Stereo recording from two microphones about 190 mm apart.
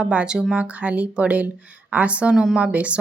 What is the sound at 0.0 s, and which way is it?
Speech, 5° right (ahead or behind).